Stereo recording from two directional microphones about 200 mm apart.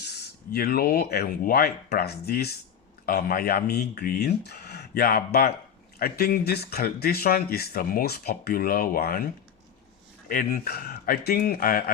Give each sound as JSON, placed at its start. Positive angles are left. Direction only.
{"t": 0.1, "sound": "speech", "side_deg": 50}
{"t": 10.2, "sound": "speech", "side_deg": 45}